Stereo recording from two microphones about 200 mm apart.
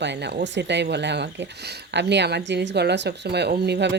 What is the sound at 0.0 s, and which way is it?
Speech, 60° right (ahead or behind).